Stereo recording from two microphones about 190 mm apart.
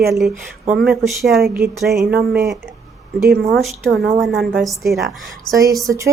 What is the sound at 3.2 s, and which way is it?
Speech, 55° right (ahead or behind).